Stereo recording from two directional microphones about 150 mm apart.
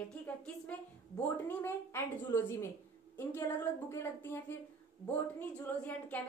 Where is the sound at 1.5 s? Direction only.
15° left (ahead or behind).